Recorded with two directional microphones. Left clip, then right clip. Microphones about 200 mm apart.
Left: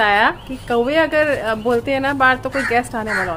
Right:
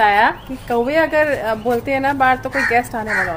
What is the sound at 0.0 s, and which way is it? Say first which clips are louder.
A woman's voice: right 1 dB; centre (ahead or behind).